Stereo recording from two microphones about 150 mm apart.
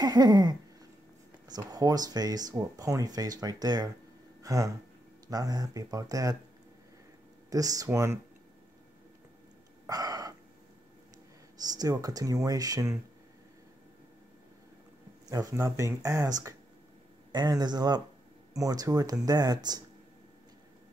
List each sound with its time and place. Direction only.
0.0 s speech: 25° right (ahead or behind)
4.4 s a sound: 20° right (ahead or behind)
5.3 s speech: 25° right (ahead or behind)
7.4 s speech: 25° right (ahead or behind)
9.8 s a sound: 25° right (ahead or behind)
11.5 s speech: 25° right (ahead or behind)
15.2 s speech: 25° right (ahead or behind)